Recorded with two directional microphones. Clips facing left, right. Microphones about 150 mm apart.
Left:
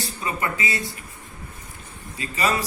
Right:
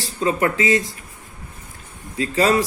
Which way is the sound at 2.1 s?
90° right.